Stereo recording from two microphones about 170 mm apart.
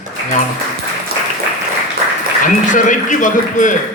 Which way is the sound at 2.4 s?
50° left (ahead or behind).